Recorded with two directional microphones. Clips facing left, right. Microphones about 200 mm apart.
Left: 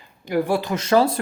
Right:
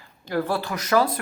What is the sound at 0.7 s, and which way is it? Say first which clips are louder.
Speech: left 3 dB; 25° left (ahead or behind).